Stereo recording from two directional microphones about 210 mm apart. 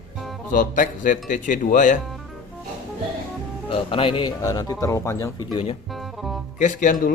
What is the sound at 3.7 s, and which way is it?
A man's voice, 25° left (ahead or behind).